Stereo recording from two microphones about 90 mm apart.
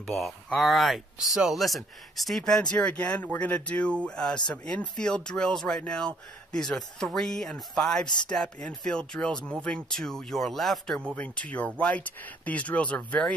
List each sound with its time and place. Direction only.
0.0 s speech: centre (ahead or behind)
11.1 s speech: 15° left (ahead or behind)